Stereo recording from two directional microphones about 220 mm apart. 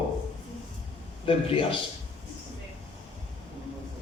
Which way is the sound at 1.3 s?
25° left (ahead or behind).